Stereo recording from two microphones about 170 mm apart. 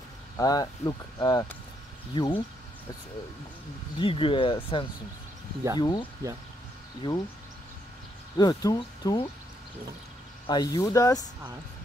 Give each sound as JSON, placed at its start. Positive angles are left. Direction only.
{"t": 0.4, "sound": "speech", "side_deg": 20}
{"t": 4.0, "sound": "speech", "side_deg": 30}
{"t": 8.4, "sound": "speech", "side_deg": 25}
{"t": 10.4, "sound": "speech", "side_deg": 25}